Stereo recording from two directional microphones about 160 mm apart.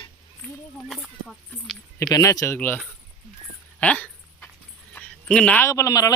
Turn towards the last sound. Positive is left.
turn(degrees=20)  # may be behind; listen again after turning